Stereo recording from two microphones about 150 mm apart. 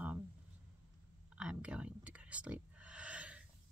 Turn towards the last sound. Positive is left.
turn(degrees=-10)  # may be behind; listen again after turning